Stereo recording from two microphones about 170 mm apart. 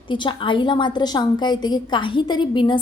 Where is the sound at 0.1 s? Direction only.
30° left (ahead or behind).